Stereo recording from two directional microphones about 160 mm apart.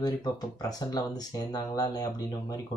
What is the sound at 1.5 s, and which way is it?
Speech, 20° left (ahead or behind).